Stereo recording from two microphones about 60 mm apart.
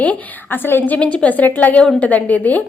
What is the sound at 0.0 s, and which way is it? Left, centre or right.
Speech, left.